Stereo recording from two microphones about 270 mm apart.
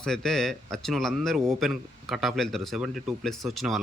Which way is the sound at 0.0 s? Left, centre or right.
Centre.